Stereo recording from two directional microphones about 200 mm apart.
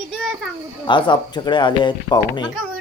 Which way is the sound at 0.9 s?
25° left (ahead or behind).